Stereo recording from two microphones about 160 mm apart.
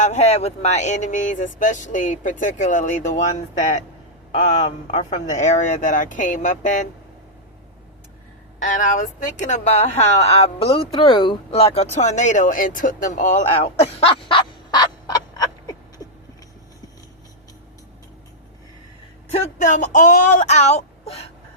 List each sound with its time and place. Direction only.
0.0 s speech: 45° left (ahead or behind)
8.5 s speech: 50° left (ahead or behind)
14.0 s fowl: 35° left (ahead or behind)
19.3 s speech: 50° left (ahead or behind)